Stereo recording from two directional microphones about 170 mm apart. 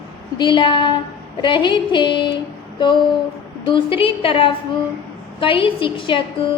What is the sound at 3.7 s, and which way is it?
A woman's voice, 30° left (ahead or behind).